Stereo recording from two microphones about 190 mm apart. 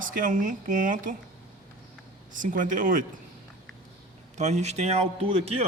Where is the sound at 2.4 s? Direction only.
45° right (ahead or behind).